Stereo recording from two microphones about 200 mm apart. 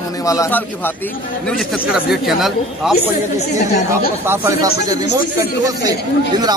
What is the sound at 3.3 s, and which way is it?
Speech, 35° left (ahead or behind).